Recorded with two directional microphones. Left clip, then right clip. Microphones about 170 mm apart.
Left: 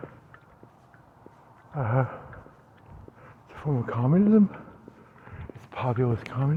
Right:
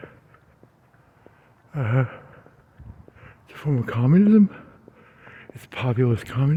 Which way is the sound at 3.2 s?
90° right.